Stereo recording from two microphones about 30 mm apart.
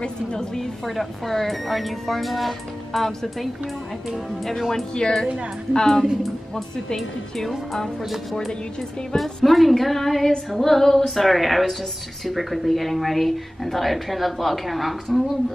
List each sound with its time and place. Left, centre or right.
0.8 s speech: centre
4.5 s a woman's voice: centre
4.9 s a woman's voice: left
7.0 s speech: centre
9.1 s a woman's voice: centre